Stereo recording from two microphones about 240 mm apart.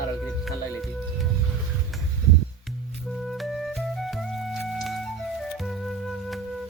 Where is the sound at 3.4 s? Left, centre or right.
Centre.